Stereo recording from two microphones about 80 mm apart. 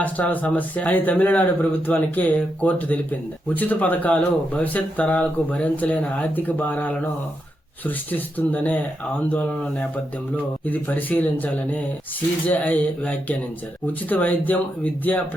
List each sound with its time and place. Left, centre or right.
0.0 s speech: centre